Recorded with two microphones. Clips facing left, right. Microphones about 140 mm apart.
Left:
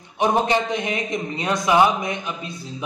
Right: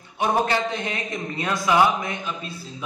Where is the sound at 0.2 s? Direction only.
20° left (ahead or behind).